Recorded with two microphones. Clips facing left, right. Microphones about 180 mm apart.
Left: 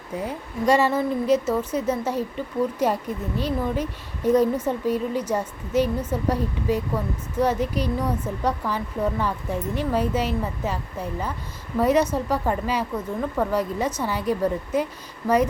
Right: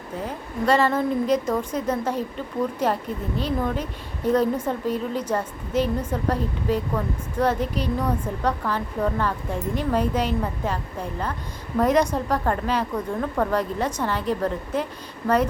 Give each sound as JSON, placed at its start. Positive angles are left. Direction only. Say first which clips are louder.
{"t": 0.3, "sound": "speech", "louder": "left 1 dB", "side_deg": 10}
{"t": 11.8, "sound": "speech", "louder": "even", "side_deg": 10}